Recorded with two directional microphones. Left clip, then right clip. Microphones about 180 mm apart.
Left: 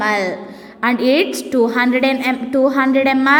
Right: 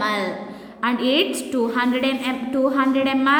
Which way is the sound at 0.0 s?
30° left (ahead or behind).